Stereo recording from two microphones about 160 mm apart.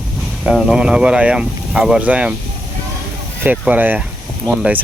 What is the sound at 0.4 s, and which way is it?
Speech, centre (ahead or behind).